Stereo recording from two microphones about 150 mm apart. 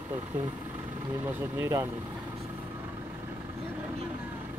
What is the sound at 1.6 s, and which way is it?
Speech, 20° right (ahead or behind).